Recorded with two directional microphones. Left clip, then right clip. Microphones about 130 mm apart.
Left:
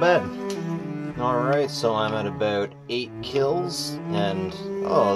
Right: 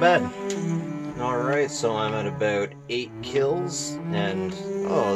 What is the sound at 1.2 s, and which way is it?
Speech, 20° left (ahead or behind).